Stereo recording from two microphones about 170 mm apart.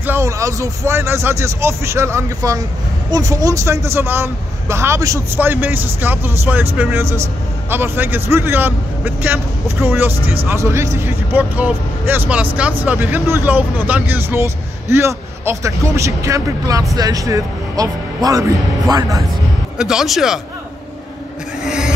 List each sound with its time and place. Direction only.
0.0 s speech: 15° right (ahead or behind)
19.8 s speech: 5° right (ahead or behind)
21.6 s printer: 5° right (ahead or behind)